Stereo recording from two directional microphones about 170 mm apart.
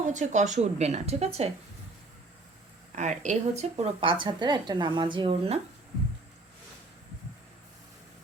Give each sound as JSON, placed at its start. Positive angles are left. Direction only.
{"t": 0.0, "sound": "speech", "side_deg": -45}
{"t": 2.9, "sound": "speech", "side_deg": -45}